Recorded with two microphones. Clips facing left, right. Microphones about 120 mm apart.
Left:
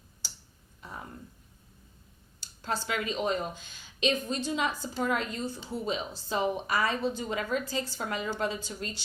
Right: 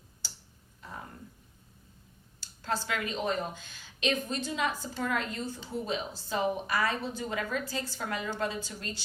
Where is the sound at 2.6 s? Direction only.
20° left (ahead or behind).